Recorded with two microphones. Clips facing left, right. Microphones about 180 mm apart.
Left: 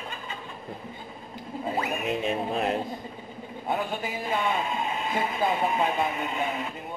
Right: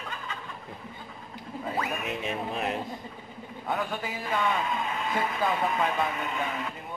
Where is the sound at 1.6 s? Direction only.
25° left (ahead or behind).